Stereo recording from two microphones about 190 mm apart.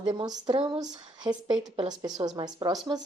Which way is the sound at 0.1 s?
25° right (ahead or behind).